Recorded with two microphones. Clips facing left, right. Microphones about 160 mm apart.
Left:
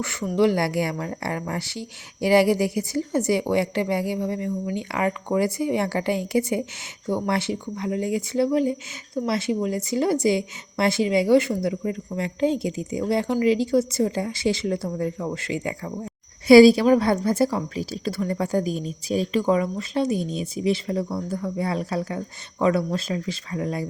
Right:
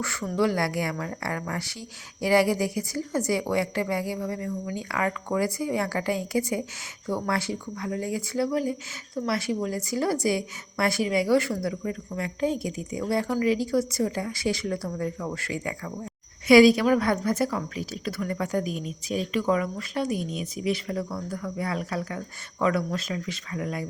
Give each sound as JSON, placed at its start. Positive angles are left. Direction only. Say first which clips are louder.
{"t": 0.0, "sound": "a woman's voice", "louder": "left 4 dB", "side_deg": 20}